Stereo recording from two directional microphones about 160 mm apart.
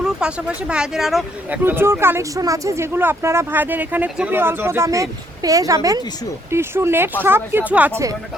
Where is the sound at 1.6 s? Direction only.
15° right (ahead or behind).